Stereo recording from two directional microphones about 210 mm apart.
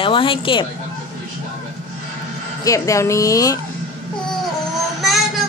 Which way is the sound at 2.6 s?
15° left (ahead or behind).